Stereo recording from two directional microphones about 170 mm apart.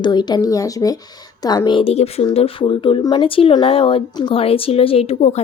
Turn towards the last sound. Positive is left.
turn(degrees=35)  # may be behind; listen again after turning